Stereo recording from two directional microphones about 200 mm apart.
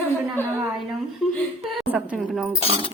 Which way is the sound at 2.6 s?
30° left (ahead or behind).